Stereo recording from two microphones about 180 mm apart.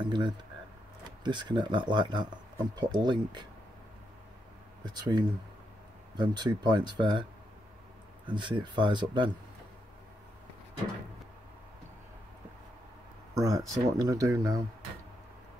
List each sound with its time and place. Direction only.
0.0 s speech: 25° right (ahead or behind)
4.8 s speech: 25° right (ahead or behind)
8.3 s speech: 25° right (ahead or behind)
13.3 s speech: 20° right (ahead or behind)